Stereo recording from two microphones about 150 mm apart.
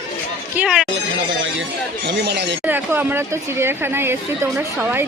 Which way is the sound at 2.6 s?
15° right (ahead or behind).